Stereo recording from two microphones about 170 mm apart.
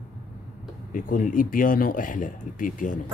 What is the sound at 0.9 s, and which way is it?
Speech, 50° left (ahead or behind).